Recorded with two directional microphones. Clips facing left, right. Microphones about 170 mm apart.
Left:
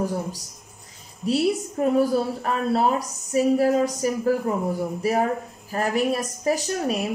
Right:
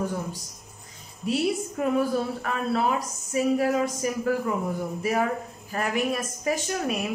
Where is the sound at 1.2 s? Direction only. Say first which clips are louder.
Left 3 dB; 35° left (ahead or behind).